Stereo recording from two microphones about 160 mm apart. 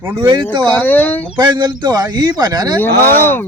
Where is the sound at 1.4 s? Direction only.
25° right (ahead or behind).